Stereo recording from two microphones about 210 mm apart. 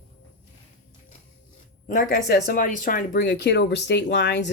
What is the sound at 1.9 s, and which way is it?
Speech, 45° left (ahead or behind).